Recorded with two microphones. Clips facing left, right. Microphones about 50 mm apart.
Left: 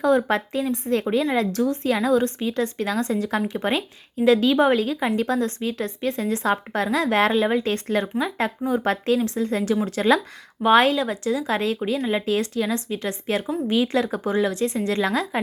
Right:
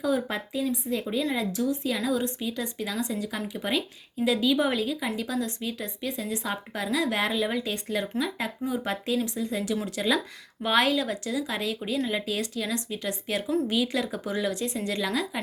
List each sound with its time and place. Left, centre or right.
0.0 s a woman's voice: left
1.2 s speech: left
1.5 s a woman's voice: left
12.2 s speech: left